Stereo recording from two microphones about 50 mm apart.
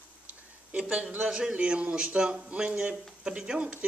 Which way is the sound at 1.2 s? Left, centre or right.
Centre.